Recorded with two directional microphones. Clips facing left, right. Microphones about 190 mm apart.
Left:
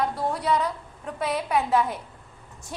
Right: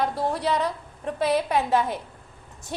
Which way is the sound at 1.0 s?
30° right (ahead or behind).